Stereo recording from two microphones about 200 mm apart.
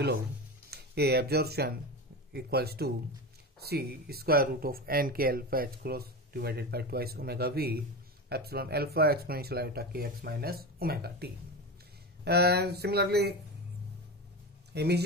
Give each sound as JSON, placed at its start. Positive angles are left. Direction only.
{"t": 0.7, "sound": "speech", "side_deg": -55}
{"t": 14.7, "sound": "speech", "side_deg": -55}